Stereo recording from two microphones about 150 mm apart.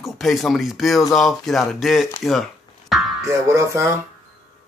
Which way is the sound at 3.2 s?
20° right (ahead or behind).